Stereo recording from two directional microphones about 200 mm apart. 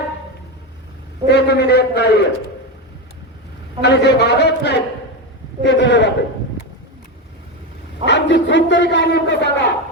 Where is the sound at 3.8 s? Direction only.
60° left (ahead or behind).